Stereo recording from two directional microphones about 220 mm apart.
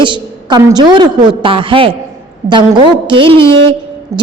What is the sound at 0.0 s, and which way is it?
A woman's voice, 20° right (ahead or behind).